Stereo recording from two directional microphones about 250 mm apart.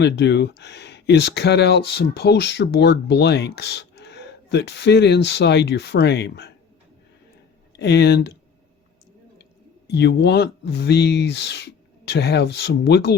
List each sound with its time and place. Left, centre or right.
0.0 s speech: left
7.8 s speech: left
9.4 s speech: left